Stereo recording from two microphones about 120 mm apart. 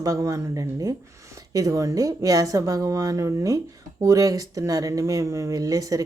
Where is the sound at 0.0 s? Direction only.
30° right (ahead or behind).